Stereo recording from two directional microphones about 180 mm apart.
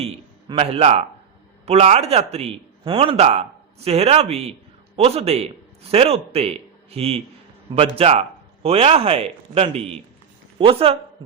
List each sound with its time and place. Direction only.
0.0 s a man's voice: 30° right (ahead or behind)